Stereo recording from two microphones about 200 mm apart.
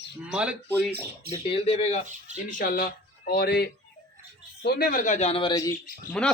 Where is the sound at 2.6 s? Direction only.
45° left (ahead or behind); by 5.5 s 30° left (ahead or behind).